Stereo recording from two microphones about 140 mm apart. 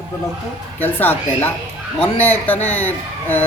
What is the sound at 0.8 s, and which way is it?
Speech, 15° left (ahead or behind).